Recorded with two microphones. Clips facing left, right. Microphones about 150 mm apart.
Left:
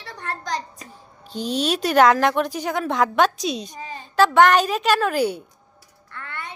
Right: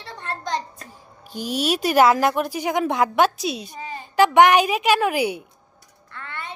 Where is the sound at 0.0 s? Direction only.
25° right (ahead or behind).